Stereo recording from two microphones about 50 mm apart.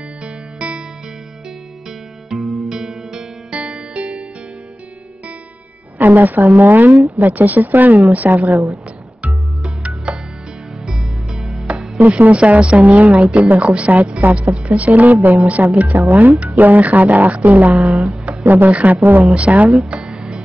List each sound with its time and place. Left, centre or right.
2.2 s music: centre
3.6 s music: right
5.9 s a woman's voice: right
10.1 s music: right
11.0 s music: centre
12.1 s a woman's voice: right
19.3 s a woman's voice: right
19.9 s music: centre